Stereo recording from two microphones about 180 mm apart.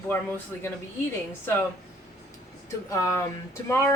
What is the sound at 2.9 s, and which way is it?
Speech, 15° left (ahead or behind).